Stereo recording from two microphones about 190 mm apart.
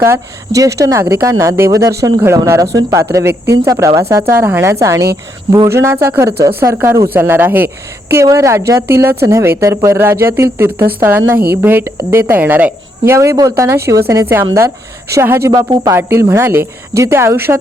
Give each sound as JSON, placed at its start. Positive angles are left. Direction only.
{"t": 0.0, "sound": "a woman's voice", "side_deg": -15}